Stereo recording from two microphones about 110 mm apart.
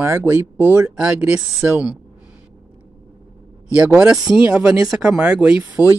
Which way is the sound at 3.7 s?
10° right (ahead or behind).